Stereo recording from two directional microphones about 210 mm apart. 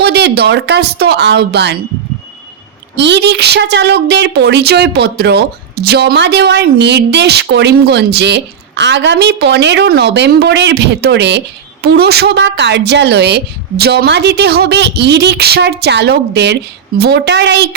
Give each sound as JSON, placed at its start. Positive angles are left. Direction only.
{"t": 0.0, "sound": "a woman's voice", "side_deg": -55}
{"t": 2.9, "sound": "a woman's voice", "side_deg": -55}